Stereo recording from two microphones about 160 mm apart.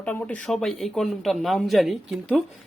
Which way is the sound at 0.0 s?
10° left (ahead or behind).